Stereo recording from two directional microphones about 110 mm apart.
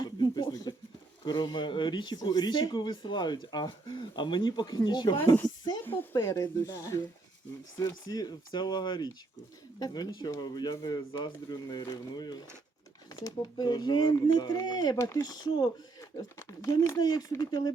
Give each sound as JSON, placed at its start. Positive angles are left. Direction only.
{"t": 0.0, "sound": "a sound", "side_deg": 40}
{"t": 1.2, "sound": "speech", "side_deg": 40}
{"t": 6.0, "sound": "speech", "side_deg": 30}
{"t": 17.0, "sound": "speech", "side_deg": 35}